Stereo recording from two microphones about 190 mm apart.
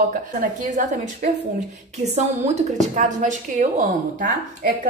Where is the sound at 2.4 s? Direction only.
40° right (ahead or behind).